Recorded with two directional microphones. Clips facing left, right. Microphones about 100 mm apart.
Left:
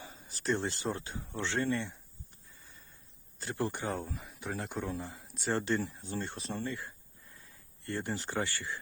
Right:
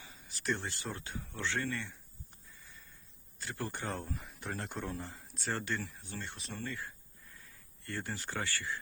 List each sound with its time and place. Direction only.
0.0 s speech: 35° left (ahead or behind)
3.3 s speech: 30° left (ahead or behind)
3.6 s speech: 15° left (ahead or behind)
3.9 s speech: 5° left (ahead or behind)
5.4 s speech: 25° left (ahead or behind)
6.6 s speech: 20° left (ahead or behind)